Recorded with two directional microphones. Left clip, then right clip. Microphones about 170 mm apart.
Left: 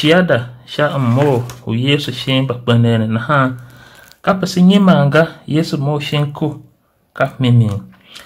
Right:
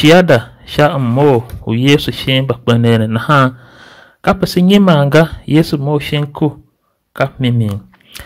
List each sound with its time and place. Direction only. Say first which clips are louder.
0.0 s speech: right 4 dB; 55° right (ahead or behind)
0.9 s speech: right 4 dB; 35° right (ahead or behind)
1.7 s speech: right 5 dB; 45° right (ahead or behind)